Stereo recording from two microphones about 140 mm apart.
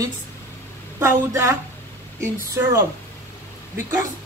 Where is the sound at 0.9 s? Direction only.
20° right (ahead or behind).